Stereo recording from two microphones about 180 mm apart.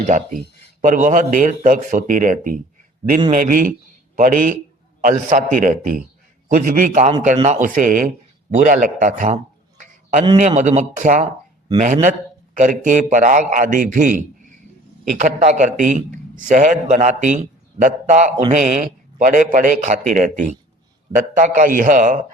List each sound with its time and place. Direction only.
0.8 s a man's voice: 45° right (ahead or behind)
10.4 s a man's voice: 40° right (ahead or behind)